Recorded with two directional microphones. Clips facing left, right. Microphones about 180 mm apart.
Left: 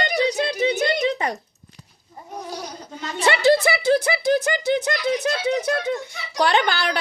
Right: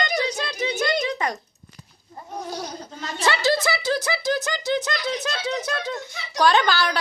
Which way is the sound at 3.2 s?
60° left (ahead or behind).